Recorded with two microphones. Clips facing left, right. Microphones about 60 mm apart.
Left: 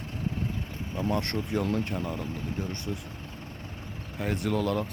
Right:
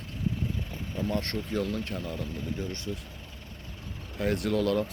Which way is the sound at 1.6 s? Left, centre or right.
Left.